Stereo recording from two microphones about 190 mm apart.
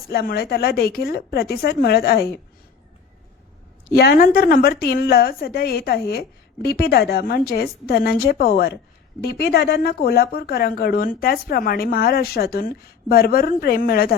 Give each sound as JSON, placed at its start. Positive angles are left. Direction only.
{"t": 0.1, "sound": "speech", "side_deg": 55}
{"t": 3.9, "sound": "speech", "side_deg": 50}